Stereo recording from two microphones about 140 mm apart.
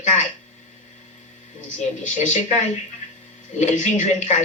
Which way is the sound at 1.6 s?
65° left (ahead or behind).